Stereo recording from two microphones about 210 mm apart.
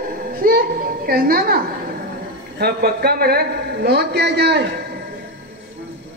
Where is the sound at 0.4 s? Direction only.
45° right (ahead or behind).